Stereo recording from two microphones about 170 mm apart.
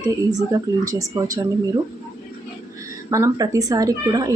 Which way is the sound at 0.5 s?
20° right (ahead or behind).